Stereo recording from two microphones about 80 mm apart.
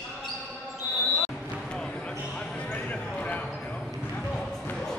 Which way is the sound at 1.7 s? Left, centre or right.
Centre.